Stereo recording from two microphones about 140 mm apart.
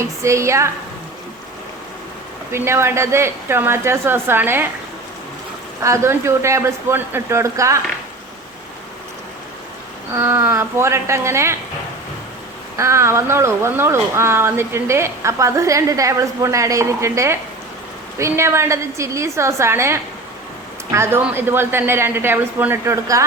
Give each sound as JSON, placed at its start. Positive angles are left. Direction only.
{"t": 0.0, "sound": "speech", "side_deg": -20}
{"t": 2.5, "sound": "speech", "side_deg": -20}
{"t": 5.8, "sound": "speech", "side_deg": -20}
{"t": 10.2, "sound": "speech", "side_deg": -15}
{"t": 12.7, "sound": "speech", "side_deg": -20}